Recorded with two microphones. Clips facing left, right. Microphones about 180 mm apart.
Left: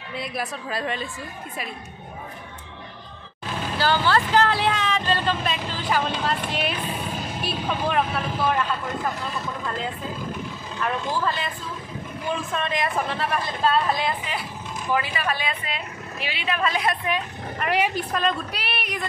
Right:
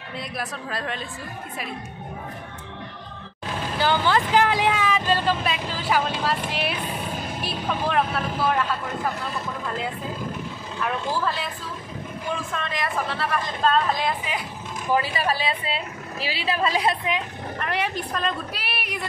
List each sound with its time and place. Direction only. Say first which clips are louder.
0.1 s speech: left 2 dB; centre (ahead or behind)
3.7 s speech: even; 15° right (ahead or behind); by 8.5 s centre (ahead or behind)
10.8 s speech: even; 5° right (ahead or behind)
12.5 s speech: left 4 dB; 20° left (ahead or behind); by 14.1 s 5° left (ahead or behind)
14.9 s speech: right 2 dB; 35° right (ahead or behind)
17.6 s a woman's voice: left 4 dB; 10° left (ahead or behind); by 19.0 s 5° right (ahead or behind)